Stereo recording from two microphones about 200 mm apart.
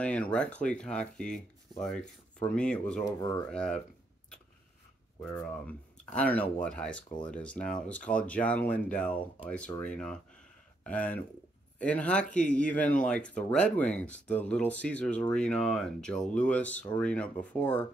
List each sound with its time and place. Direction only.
0.0 s speech: 5° left (ahead or behind)
3.1 s speech: 20° left (ahead or behind)
3.5 s speech: 5° left (ahead or behind)
5.2 s speech: 5° left (ahead or behind)